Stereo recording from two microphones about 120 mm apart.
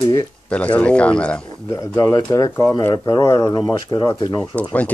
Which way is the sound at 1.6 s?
25° left (ahead or behind).